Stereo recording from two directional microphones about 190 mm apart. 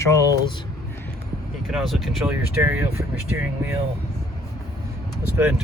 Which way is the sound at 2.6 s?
10° right (ahead or behind).